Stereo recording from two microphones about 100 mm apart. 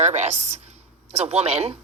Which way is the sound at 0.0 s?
90° right.